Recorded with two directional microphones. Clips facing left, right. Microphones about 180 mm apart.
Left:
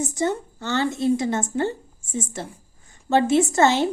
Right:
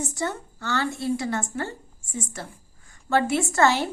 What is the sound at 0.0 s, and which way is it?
A woman's voice, 20° left (ahead or behind).